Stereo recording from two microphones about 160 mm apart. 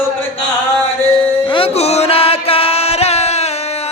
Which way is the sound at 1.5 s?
35° left (ahead or behind).